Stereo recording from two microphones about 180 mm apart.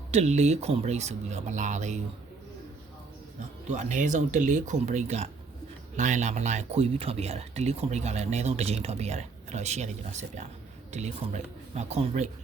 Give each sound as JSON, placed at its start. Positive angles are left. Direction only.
{"t": 0.1, "sound": "speech", "side_deg": -40}
{"t": 3.7, "sound": "speech", "side_deg": -40}